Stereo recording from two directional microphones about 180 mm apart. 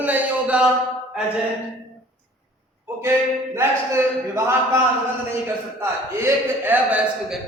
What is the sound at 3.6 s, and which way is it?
A man's voice, 15° right (ahead or behind).